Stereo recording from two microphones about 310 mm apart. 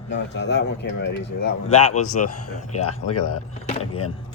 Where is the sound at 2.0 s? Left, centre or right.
Left.